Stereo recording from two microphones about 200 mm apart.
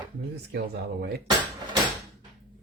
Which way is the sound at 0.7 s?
55° right (ahead or behind).